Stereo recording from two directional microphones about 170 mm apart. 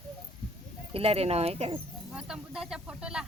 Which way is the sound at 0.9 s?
35° right (ahead or behind).